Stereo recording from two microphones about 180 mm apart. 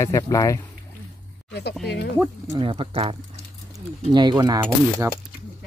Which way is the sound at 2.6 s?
30° right (ahead or behind).